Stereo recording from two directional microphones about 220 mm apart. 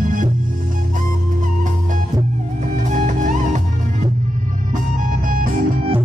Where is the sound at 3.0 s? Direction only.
35° right (ahead or behind).